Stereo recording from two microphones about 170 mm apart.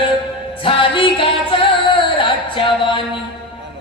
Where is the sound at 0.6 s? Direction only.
30° left (ahead or behind).